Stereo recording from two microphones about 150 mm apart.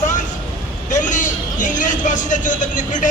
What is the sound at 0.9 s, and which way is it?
Speech, 55° left (ahead or behind).